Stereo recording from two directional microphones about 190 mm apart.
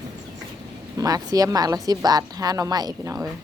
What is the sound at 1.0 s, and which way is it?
A woman's voice, 20° right (ahead or behind).